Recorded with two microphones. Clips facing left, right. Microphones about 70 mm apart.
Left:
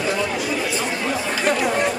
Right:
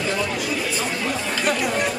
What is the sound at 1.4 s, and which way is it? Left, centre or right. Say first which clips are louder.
Chatter: left 3 dB; left.